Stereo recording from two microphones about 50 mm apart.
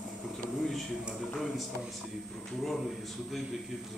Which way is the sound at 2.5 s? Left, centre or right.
Centre.